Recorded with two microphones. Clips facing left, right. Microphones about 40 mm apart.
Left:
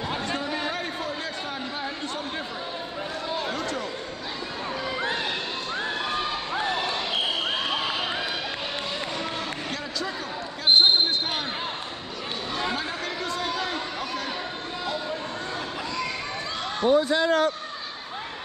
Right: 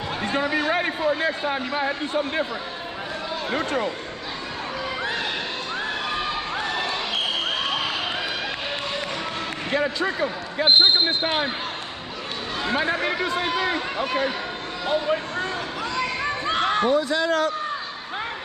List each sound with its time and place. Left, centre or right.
0.4 s a sound: right
0.7 s a man's voice: right
3.5 s a man's voice: right
9.7 s speech: right
12.7 s a man's voice: right
14.9 s speech: right
16.2 s a sound: right
17.1 s a man's voice: right